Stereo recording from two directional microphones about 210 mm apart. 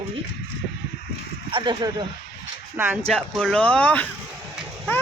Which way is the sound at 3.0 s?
Centre (ahead or behind).